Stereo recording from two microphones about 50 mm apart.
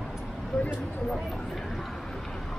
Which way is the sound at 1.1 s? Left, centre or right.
Centre.